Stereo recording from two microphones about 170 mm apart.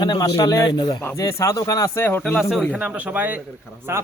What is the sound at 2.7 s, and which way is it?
Speech, 10° right (ahead or behind).